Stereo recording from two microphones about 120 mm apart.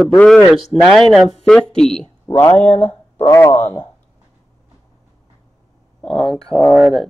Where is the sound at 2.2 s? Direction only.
25° left (ahead or behind).